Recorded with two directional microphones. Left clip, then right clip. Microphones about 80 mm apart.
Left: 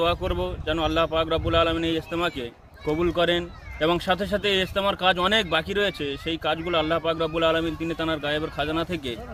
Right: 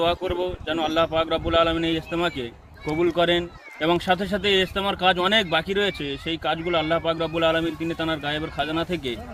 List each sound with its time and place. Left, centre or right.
0.0 s speech: left